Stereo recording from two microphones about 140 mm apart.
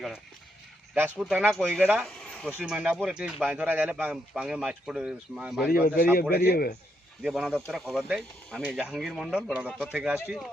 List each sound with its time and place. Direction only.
0.9 s speech: 15° right (ahead or behind)
1.8 s speech: 10° right (ahead or behind)
2.0 s a sound: 5° left (ahead or behind)
2.6 s speech: 10° right (ahead or behind)
6.3 s a man's voice: 90° left
7.2 s speech: 5° right (ahead or behind)